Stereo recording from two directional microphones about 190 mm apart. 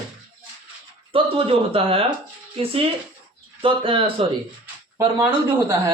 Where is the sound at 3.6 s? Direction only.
30° right (ahead or behind).